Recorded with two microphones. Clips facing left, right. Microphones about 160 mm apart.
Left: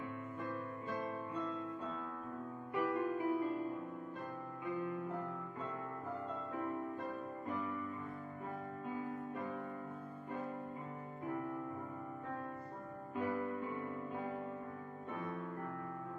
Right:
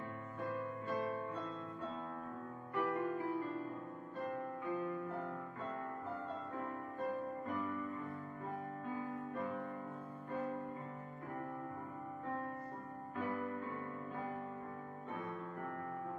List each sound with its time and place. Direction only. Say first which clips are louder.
2.7 s music: left 1 dB; 10° left (ahead or behind)
13.1 s music: left 2 dB; 15° left (ahead or behind)